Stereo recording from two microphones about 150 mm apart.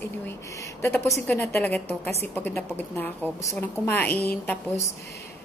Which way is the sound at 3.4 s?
15° left (ahead or behind).